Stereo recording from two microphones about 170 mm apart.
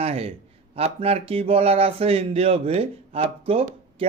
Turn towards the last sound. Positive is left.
turn(degrees=-35)  # may be behind; listen again after turning